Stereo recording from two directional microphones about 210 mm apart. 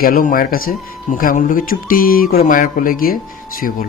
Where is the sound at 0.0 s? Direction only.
40° left (ahead or behind).